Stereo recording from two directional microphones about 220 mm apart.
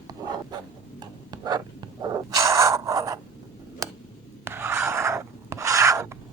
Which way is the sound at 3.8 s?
15° right (ahead or behind).